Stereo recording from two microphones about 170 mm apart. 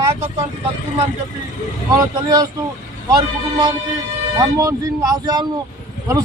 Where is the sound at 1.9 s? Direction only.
20° right (ahead or behind).